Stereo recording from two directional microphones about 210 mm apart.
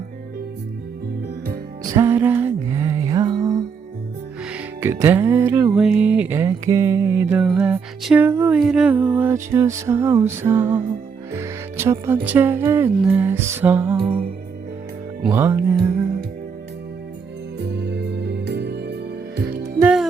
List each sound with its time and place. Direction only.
1.8 s music: 15° right (ahead or behind)
15.3 s music: 10° right (ahead or behind)
17.6 s music: 55° right (ahead or behind)
19.8 s music: 5° right (ahead or behind)